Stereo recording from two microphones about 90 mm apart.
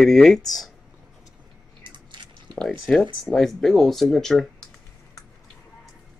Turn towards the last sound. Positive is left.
turn(degrees=0)  # may be behind; listen again after turning